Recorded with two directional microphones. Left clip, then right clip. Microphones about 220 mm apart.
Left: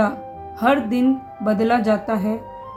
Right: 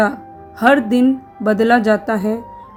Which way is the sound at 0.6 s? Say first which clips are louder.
Right 5 dB; 35° right (ahead or behind).